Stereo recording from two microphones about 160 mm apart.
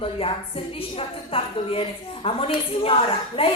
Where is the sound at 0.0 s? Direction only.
35° left (ahead or behind).